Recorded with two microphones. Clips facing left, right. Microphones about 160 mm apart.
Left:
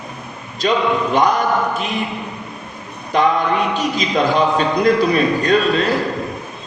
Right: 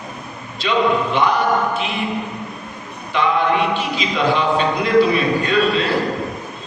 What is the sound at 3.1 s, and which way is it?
A man's voice, 45° left (ahead or behind).